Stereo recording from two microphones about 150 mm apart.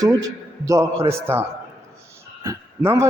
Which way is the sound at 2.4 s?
20° right (ahead or behind).